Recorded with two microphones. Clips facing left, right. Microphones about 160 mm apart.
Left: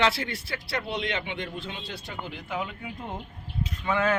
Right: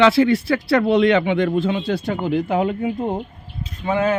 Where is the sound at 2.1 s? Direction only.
50° right (ahead or behind).